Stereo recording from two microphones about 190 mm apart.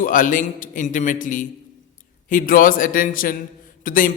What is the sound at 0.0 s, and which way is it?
A man's voice, 45° left (ahead or behind).